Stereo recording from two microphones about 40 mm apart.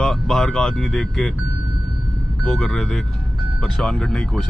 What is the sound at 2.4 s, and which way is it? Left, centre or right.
Speech, centre.